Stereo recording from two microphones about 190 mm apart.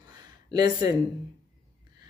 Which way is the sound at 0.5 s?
20° right (ahead or behind).